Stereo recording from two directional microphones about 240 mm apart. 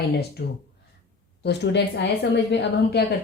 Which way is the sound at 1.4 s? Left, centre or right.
Left.